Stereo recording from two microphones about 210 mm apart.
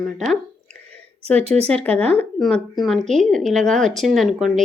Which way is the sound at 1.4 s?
30° right (ahead or behind).